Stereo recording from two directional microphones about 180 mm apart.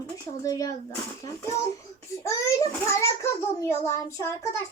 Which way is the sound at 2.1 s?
15° left (ahead or behind).